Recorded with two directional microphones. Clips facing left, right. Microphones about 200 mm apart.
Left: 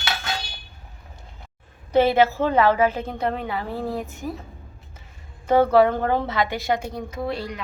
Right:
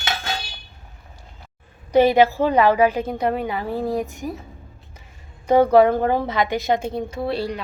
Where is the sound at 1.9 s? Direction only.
15° right (ahead or behind).